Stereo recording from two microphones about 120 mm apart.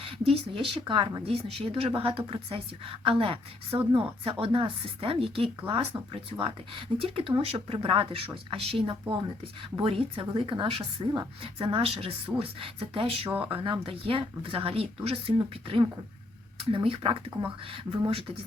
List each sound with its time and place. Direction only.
0.0 s speech: 50° right (ahead or behind)